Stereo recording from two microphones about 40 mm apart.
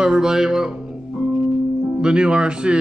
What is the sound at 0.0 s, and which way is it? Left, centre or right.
Speech, centre.